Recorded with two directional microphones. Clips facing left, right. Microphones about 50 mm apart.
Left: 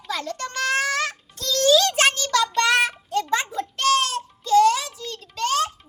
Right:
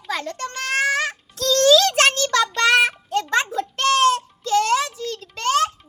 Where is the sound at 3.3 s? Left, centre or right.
Right.